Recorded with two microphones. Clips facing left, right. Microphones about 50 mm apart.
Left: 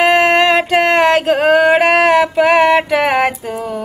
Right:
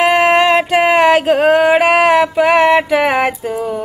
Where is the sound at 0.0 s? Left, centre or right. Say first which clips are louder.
Even; centre.